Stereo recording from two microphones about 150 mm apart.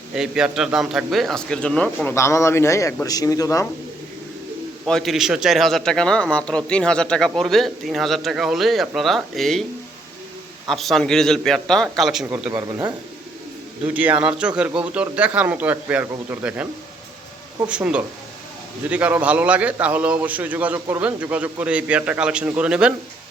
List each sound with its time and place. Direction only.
0.1 s a man's voice: 5° right (ahead or behind)
2.1 s a man's voice: 20° left (ahead or behind)
4.9 s a man's voice: centre (ahead or behind)
10.7 s a man's voice: centre (ahead or behind)
12.3 s a man's voice: 15° right (ahead or behind)
13.8 s a man's voice: 10° right (ahead or behind)
17.7 s a man's voice: 5° right (ahead or behind)